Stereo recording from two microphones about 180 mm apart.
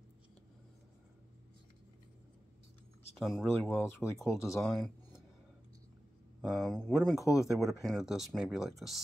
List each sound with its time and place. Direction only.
3.2 s speech: centre (ahead or behind)
3.5 s speech: 10° left (ahead or behind)
6.4 s speech: centre (ahead or behind)